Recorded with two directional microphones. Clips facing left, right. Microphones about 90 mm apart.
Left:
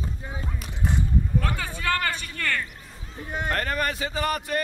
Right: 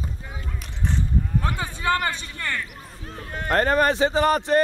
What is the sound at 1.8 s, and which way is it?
Speech, 20° right (ahead or behind).